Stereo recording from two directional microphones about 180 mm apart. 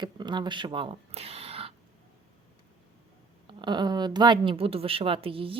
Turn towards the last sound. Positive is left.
turn(degrees=-30)  # may be behind; listen again after turning